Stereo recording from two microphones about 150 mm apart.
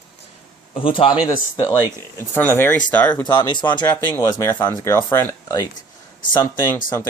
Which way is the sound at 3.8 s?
15° left (ahead or behind).